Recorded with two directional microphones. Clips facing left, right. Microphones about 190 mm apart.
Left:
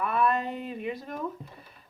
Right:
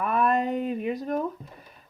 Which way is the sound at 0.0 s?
40° right (ahead or behind).